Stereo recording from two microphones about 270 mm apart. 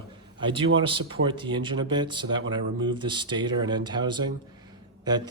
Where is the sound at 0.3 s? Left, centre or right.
Centre.